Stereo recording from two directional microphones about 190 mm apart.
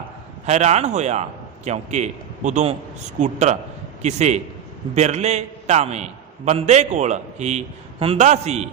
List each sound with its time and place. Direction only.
0.4 s a man's voice: 35° right (ahead or behind)